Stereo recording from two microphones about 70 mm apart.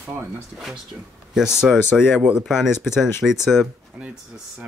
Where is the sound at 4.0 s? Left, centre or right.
Centre.